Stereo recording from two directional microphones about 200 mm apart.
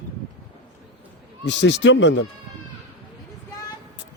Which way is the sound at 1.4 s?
65° left (ahead or behind).